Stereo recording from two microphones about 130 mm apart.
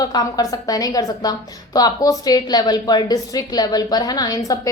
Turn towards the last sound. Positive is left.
turn(degrees=30)  # may be behind; listen again after turning